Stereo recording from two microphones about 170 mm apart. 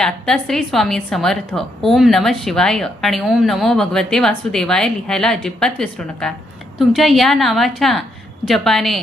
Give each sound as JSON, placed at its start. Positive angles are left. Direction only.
{"t": 0.0, "sound": "speech", "side_deg": 5}